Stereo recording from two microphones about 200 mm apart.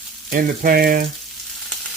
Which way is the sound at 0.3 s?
50° right (ahead or behind).